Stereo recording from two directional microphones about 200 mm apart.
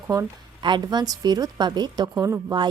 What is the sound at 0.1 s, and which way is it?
A woman's voice, 20° right (ahead or behind).